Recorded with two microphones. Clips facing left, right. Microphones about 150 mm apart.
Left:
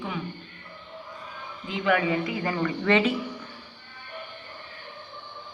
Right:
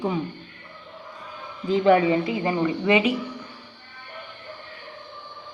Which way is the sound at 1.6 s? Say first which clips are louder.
Right 7 dB; 35° right (ahead or behind).